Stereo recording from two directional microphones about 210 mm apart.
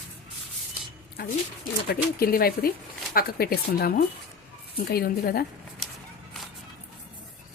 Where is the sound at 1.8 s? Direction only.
45° left (ahead or behind).